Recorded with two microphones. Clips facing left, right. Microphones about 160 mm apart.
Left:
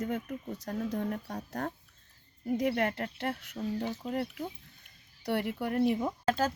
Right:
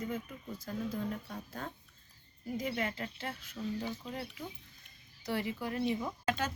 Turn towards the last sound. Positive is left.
turn(degrees=35)  # may be behind; listen again after turning